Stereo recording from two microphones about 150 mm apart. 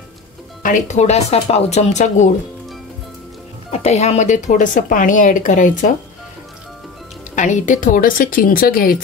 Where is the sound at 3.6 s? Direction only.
45° left (ahead or behind).